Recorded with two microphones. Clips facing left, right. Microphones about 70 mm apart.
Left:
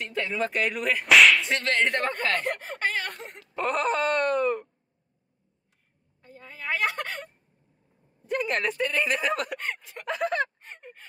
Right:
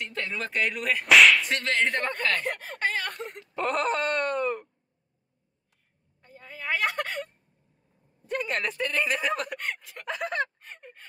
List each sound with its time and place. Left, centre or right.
0.1 s whip: centre
2.1 s a sound: left
3.5 s whip: centre
6.3 s a sound: centre
8.3 s whip: centre
9.7 s gasp: centre